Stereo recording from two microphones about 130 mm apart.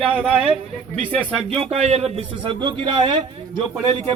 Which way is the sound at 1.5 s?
55° right (ahead or behind).